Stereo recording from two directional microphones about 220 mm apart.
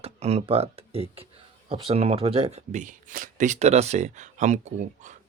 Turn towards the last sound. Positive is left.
turn(degrees=-35)  # may be behind; listen again after turning